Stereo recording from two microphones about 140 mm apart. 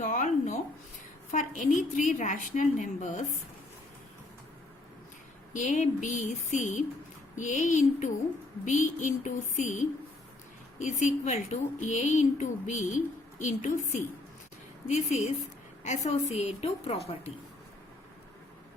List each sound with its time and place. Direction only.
0.0 s a sound: 65° left (ahead or behind)
1.3 s a woman's voice: 65° left (ahead or behind)
5.5 s a woman's voice: 60° left (ahead or behind)